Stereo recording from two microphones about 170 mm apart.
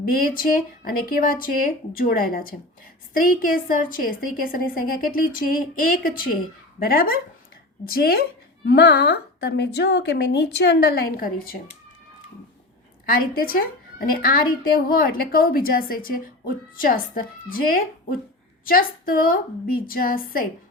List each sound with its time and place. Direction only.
0.1 s a woman's voice: 55° left (ahead or behind)
13.1 s a woman's voice: 60° left (ahead or behind)
18.6 s a woman's voice: 55° left (ahead or behind)